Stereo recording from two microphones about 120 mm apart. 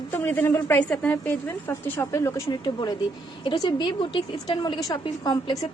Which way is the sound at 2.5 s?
35° left (ahead or behind).